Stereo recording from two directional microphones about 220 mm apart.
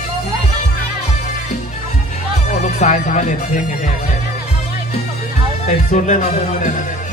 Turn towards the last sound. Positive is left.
turn(degrees=35)  # may be behind; listen again after turning